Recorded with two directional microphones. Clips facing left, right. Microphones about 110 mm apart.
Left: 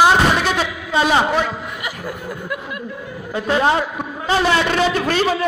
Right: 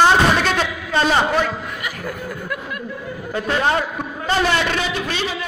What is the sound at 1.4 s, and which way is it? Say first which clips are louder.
Chuckle: even; 20° left (ahead or behind).